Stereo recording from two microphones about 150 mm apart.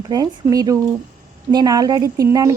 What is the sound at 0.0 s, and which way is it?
A woman's voice, 25° right (ahead or behind).